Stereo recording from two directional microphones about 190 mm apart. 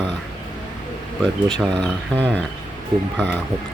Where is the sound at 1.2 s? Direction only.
5° left (ahead or behind).